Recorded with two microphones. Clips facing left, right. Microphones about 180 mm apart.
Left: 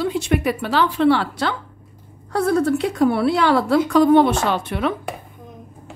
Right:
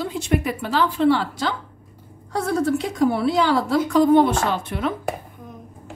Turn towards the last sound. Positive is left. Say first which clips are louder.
# left 3 dB
turn(degrees=75)  # may be behind; listen again after turning